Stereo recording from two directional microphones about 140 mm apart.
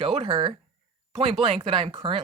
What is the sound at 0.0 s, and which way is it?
Speech, 40° right (ahead or behind).